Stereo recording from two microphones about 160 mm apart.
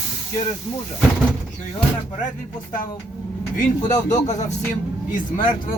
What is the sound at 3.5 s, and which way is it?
A man's voice, 50° left (ahead or behind).